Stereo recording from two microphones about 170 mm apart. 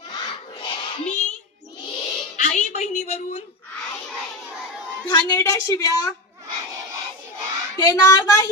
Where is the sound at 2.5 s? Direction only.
40° left (ahead or behind).